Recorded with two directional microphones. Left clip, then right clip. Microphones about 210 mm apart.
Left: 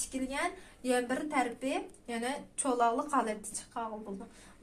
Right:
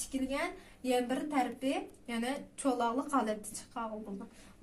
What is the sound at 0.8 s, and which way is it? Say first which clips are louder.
A woman's voice: left 1 dB; 25° left (ahead or behind).